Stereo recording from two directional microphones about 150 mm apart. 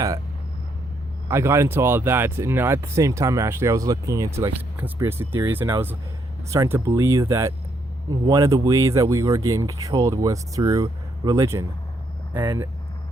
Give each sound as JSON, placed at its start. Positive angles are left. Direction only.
{"t": 1.3, "sound": "speech", "side_deg": -20}